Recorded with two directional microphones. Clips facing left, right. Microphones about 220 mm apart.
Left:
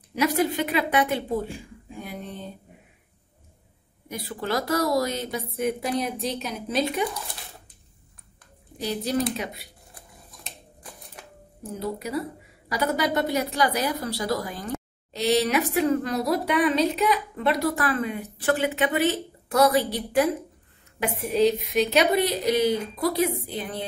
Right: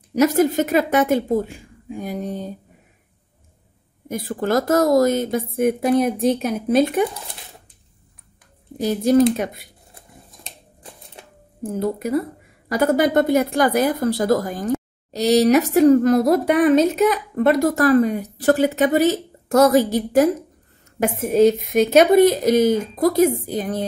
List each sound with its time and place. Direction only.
0.1 s a woman's voice: 45° right (ahead or behind)
4.1 s a woman's voice: 50° right (ahead or behind)
8.7 s a woman's voice: 45° right (ahead or behind)
11.2 s a sound: 25° right (ahead or behind)
11.6 s a woman's voice: 50° right (ahead or behind)